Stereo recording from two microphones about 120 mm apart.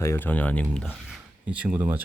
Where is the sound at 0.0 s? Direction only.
20° left (ahead or behind).